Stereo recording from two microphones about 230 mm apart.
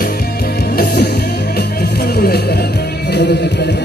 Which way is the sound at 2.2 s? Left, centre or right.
Left.